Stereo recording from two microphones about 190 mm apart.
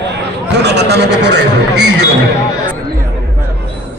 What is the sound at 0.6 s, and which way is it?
A man's voice, 60° right (ahead or behind).